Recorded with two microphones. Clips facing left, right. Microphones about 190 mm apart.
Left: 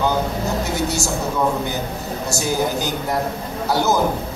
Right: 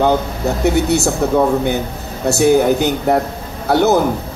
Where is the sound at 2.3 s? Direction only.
65° right (ahead or behind).